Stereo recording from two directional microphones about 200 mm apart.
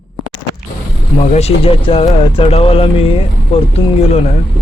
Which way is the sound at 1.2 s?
35° left (ahead or behind).